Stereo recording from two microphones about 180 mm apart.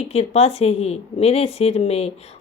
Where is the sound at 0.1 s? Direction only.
35° left (ahead or behind).